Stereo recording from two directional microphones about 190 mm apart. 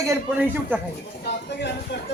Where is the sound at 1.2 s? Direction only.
60° left (ahead or behind).